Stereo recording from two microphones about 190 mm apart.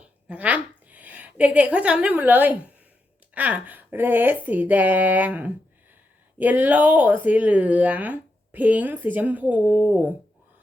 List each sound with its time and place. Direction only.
0.3 s a woman's voice: 5° right (ahead or behind)